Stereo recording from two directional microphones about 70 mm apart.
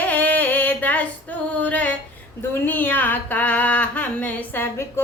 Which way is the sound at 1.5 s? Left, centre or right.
Centre.